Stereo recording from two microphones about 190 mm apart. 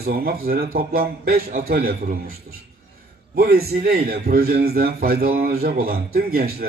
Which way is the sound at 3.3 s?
50° right (ahead or behind).